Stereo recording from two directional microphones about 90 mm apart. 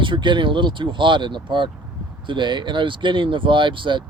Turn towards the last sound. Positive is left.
turn(degrees=-65)  # may be behind; listen again after turning